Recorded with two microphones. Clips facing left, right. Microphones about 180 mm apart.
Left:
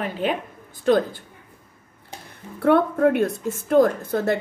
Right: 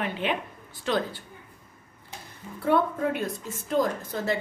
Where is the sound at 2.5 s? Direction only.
60° left (ahead or behind).